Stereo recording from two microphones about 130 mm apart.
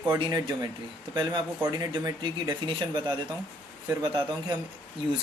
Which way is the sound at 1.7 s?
30° right (ahead or behind).